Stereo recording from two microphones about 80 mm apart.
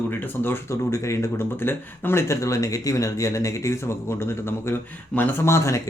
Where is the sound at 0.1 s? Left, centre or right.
Left.